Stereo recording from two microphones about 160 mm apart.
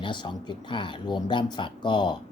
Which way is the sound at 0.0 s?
30° left (ahead or behind).